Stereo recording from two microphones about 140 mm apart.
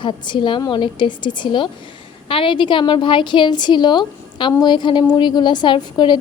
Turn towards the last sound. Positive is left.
turn(degrees=35)  # may be behind; listen again after turning